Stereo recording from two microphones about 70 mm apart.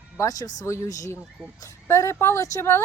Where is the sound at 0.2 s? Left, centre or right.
Left.